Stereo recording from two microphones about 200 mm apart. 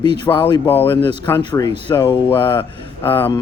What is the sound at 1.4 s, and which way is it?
Speech, 20° left (ahead or behind).